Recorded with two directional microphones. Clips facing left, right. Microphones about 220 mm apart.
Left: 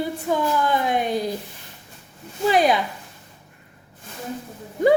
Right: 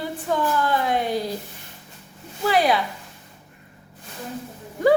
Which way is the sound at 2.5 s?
20° left (ahead or behind).